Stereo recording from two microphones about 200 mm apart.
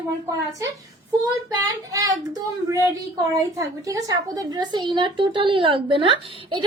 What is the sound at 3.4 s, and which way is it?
A woman's voice, 15° right (ahead or behind).